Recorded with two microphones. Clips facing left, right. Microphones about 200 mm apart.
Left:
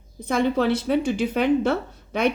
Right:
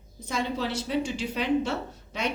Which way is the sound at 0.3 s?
60° left (ahead or behind).